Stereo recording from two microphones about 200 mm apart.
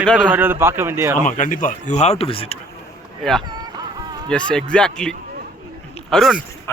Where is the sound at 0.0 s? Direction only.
5° left (ahead or behind).